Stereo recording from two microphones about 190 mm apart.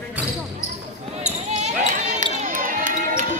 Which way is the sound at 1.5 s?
40° right (ahead or behind).